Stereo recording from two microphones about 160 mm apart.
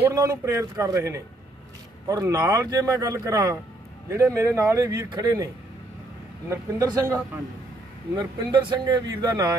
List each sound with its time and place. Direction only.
0.0 s speech: 15° right (ahead or behind)
6.5 s speech: 20° right (ahead or behind)